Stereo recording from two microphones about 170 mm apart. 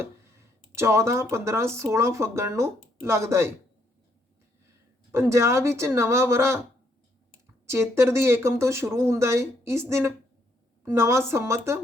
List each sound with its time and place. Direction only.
0.0 s speech: 15° right (ahead or behind)
5.1 s speech: 15° right (ahead or behind)
7.7 s speech: 15° right (ahead or behind)